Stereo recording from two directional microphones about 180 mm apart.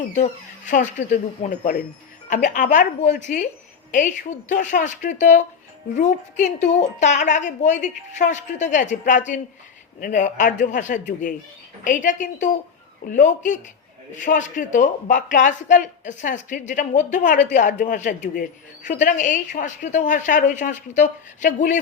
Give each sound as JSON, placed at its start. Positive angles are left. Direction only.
{"t": 0.1, "sound": "speech", "side_deg": 45}